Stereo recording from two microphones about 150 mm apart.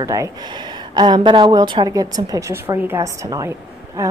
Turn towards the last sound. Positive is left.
turn(degrees=-20)  # may be behind; listen again after turning